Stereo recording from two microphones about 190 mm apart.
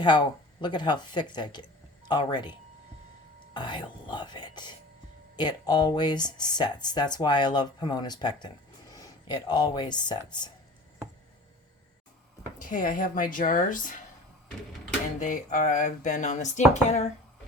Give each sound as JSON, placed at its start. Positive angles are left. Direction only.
{"t": 0.0, "sound": "speech", "side_deg": 25}
{"t": 3.5, "sound": "speech", "side_deg": 25}
{"t": 12.5, "sound": "speech", "side_deg": 45}
{"t": 15.2, "sound": "speech", "side_deg": 40}